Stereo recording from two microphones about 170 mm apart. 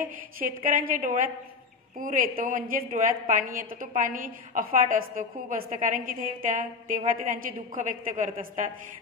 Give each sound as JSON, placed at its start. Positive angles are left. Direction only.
{"t": 0.4, "sound": "a woman's voice", "side_deg": -55}